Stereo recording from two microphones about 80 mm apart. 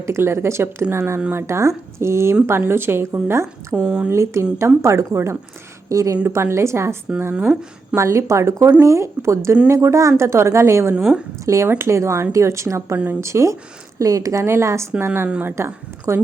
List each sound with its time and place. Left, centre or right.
0.0 s a woman's voice: right
3.8 s speech: centre
4.1 s a woman's voice: right
7.9 s a woman's voice: right
10.9 s speech: centre
11.3 s a woman's voice: right
15.5 s a woman's voice: right